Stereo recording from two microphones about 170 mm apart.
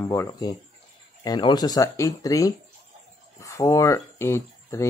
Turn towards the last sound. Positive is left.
turn(degrees=15)  # may be behind; listen again after turning